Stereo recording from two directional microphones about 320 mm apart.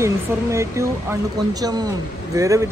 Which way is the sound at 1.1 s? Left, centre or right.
Centre.